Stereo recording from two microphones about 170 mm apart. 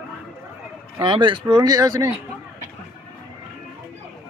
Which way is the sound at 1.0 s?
30° right (ahead or behind).